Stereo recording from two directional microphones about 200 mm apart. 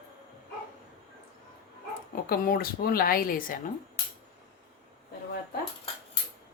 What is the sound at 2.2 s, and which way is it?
A woman's voice, 45° left (ahead or behind).